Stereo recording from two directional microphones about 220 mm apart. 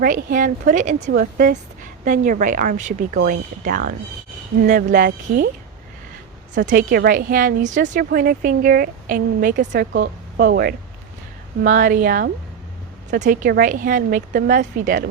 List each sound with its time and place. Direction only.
0.0 s a woman's voice: 40° right (ahead or behind)
6.7 s a woman's voice: 35° right (ahead or behind)